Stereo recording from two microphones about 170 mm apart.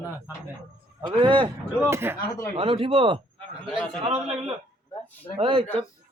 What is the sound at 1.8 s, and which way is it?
Speech, 15° right (ahead or behind).